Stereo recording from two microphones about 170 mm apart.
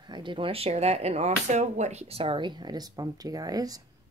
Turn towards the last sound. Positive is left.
turn(degrees=-20)  # may be behind; listen again after turning